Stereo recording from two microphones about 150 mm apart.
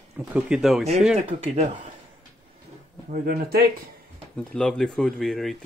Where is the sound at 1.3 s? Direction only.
45° right (ahead or behind).